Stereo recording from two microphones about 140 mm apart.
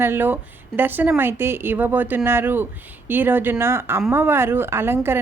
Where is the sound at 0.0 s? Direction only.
15° right (ahead or behind).